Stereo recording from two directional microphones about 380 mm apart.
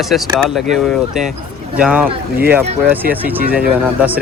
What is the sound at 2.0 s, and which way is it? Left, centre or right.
Speech, right.